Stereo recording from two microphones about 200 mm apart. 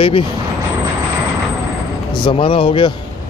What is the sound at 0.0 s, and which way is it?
Speech, 25° left (ahead or behind).